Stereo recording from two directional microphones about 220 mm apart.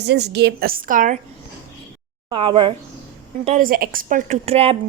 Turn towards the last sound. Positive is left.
turn(degrees=-30)  # may be behind; listen again after turning